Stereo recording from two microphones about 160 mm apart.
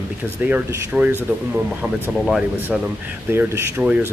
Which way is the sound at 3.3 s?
10° right (ahead or behind).